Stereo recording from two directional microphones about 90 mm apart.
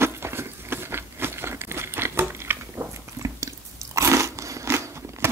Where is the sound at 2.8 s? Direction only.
30° right (ahead or behind).